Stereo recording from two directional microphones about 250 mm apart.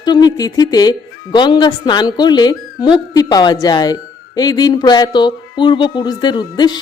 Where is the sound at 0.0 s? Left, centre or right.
Centre.